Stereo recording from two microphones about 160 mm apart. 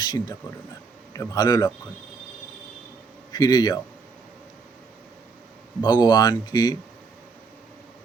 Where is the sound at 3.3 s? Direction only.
25° left (ahead or behind).